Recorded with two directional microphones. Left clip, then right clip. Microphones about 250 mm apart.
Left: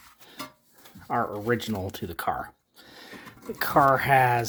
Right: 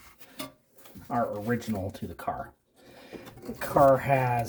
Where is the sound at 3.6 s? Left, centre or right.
Left.